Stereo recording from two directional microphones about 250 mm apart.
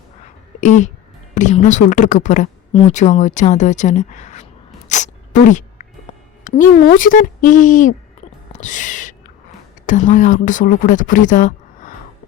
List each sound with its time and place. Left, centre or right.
0.6 s a woman's voice: left
4.9 s sneeze: left
6.4 s speech: left
8.5 s owl: left
9.8 s speech: left